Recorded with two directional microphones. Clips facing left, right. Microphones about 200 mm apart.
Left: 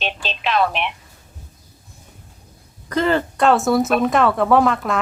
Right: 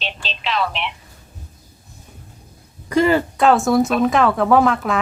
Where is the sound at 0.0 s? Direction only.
55° left (ahead or behind).